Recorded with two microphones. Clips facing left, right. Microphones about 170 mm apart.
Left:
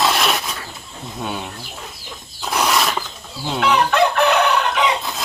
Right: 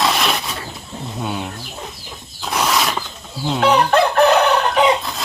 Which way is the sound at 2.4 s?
Centre (ahead or behind).